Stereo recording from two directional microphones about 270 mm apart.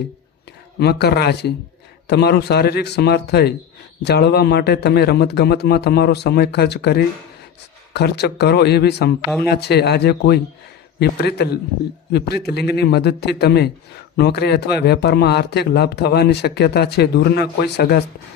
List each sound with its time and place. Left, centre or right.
0.8 s speech: left